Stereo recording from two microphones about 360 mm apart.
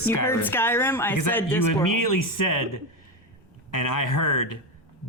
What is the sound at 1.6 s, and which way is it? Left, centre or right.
Speech, left.